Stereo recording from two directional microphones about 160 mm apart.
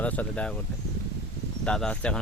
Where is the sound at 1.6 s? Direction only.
5° left (ahead or behind).